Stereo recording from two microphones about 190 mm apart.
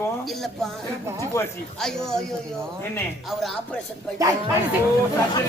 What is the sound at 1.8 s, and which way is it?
Speech, centre (ahead or behind).